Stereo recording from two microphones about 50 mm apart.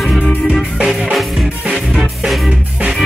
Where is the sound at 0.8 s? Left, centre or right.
Centre.